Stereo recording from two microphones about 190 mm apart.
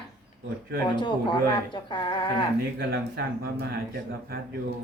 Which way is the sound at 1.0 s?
25° left (ahead or behind).